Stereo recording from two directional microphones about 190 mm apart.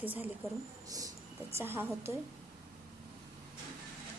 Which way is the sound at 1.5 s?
10° right (ahead or behind).